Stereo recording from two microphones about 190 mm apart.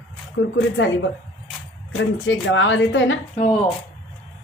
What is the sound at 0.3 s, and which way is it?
A woman's voice, 80° left.